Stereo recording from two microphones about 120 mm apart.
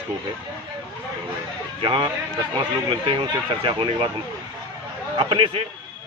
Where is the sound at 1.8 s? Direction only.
45° right (ahead or behind).